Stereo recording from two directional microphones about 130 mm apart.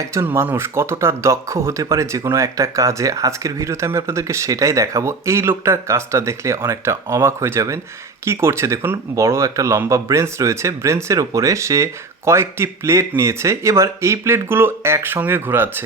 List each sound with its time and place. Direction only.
0.0 s speech: 20° right (ahead or behind)